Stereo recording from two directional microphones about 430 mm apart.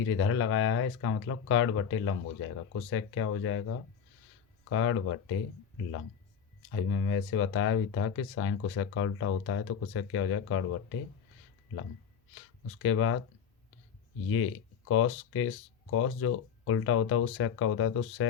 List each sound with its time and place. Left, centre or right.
0.0 s speech: left
6.7 s speech: left
12.8 s speech: left
14.3 s speech: left